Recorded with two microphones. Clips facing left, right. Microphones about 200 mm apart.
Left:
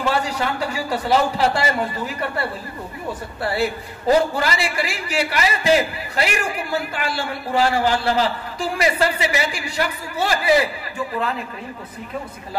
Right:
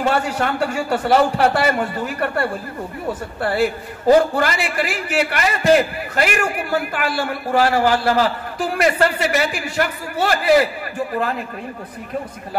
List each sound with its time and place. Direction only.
0.0 s a man's voice: 55° right (ahead or behind)
3.4 s a man's voice: 50° right (ahead or behind)